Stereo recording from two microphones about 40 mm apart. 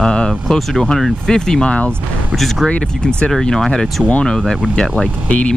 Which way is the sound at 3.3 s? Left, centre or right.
Centre.